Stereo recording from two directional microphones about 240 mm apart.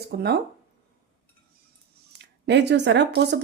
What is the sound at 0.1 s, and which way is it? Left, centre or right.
Speech, right.